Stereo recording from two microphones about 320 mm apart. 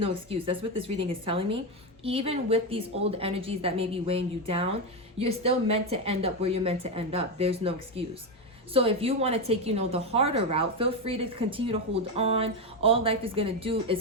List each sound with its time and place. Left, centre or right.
0.0 s a woman's voice: centre